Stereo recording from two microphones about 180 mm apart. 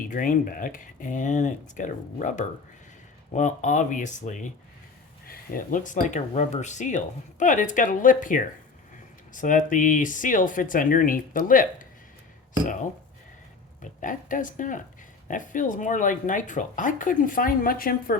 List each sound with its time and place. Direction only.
0.1 s speech: 50° left (ahead or behind)
14.0 s speech: 45° left (ahead or behind)